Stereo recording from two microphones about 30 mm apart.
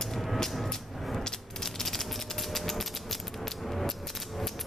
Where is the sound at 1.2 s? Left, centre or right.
Centre.